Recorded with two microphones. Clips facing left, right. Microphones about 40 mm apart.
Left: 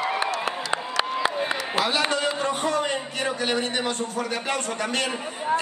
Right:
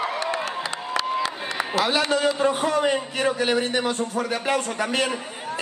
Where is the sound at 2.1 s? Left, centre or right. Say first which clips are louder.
Right 4 dB; centre.